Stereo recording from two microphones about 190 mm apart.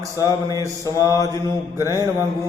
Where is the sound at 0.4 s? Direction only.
20° right (ahead or behind).